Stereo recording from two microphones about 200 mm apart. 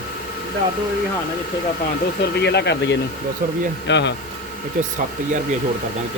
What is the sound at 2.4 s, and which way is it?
Speech, 55° left (ahead or behind).